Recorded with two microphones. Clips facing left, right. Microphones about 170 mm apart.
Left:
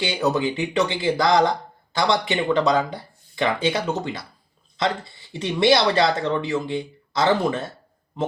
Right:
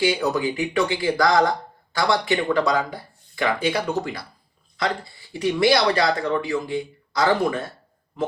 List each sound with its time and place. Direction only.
0.0 s speech: 25° left (ahead or behind)